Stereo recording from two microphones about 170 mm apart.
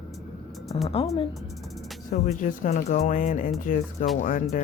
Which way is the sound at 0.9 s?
35° left (ahead or behind).